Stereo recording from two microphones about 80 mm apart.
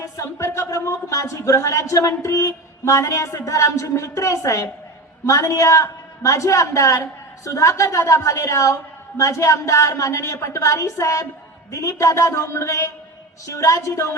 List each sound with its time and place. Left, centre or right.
0.0 s a man's voice: left